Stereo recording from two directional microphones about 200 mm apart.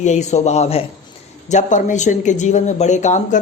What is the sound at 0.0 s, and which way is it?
Speech, 35° left (ahead or behind).